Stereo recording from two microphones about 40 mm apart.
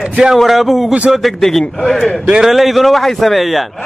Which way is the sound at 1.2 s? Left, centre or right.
Centre.